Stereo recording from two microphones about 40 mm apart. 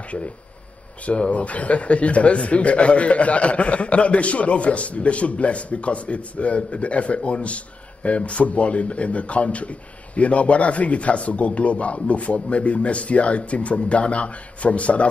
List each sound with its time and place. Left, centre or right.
1.0 s speech: left